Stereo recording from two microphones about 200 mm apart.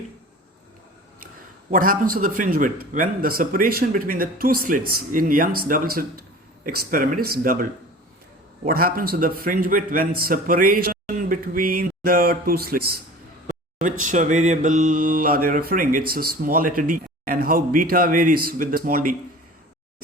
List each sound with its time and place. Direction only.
1.7 s mantra: 45° right (ahead or behind)
10.2 s speech: 45° right (ahead or behind)
14.1 s mantra: 40° right (ahead or behind)